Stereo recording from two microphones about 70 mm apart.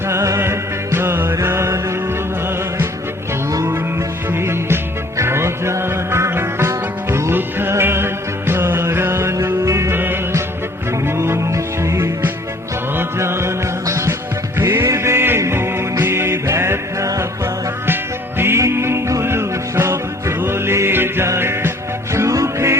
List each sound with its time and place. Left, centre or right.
0.1 s music: right
4.3 s music: right
9.9 s music: right
18.3 s music: right
22.1 s music: right